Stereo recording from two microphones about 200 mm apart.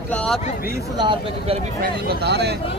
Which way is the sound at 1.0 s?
25° right (ahead or behind).